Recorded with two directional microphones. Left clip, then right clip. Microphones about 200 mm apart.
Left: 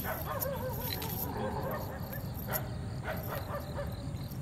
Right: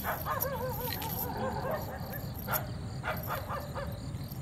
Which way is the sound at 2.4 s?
30° right (ahead or behind).